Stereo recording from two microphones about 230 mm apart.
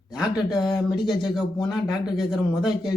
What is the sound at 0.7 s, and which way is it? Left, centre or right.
Speech, centre.